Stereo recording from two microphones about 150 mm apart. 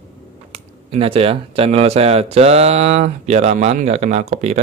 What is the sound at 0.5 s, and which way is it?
Speech, 40° right (ahead or behind).